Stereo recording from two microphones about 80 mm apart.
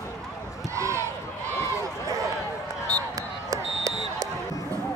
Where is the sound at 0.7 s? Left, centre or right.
Right.